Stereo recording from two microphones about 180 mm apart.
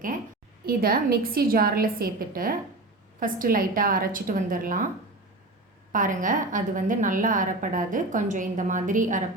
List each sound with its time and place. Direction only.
0.6 s a woman's voice: 55° right (ahead or behind)
5.9 s a woman's voice: 45° right (ahead or behind)